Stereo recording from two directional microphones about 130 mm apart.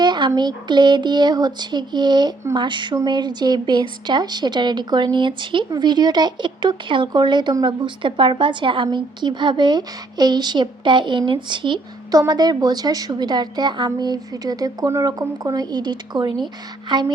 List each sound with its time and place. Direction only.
0.0 s speech: 35° right (ahead or behind)